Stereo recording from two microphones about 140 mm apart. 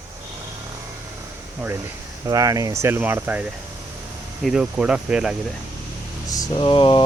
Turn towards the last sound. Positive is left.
turn(degrees=40)  # may be behind; listen again after turning